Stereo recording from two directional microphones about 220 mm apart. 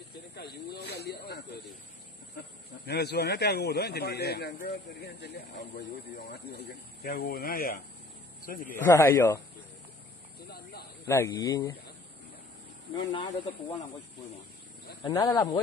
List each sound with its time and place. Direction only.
0.3 s speech: 45° left (ahead or behind)
2.9 s a man's voice: 50° left (ahead or behind)
8.8 s speech: 15° left (ahead or behind)
10.5 s a sound: 45° left (ahead or behind)
11.1 s speech: 15° left (ahead or behind)
13.1 s speech: 20° left (ahead or behind)
15.0 s speech: 20° left (ahead or behind)